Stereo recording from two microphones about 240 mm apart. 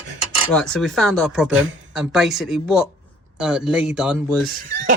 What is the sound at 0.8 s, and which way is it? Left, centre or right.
Speech, centre.